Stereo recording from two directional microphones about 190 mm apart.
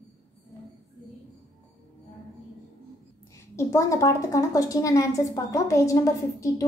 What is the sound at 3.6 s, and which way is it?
A woman's voice, 15° left (ahead or behind).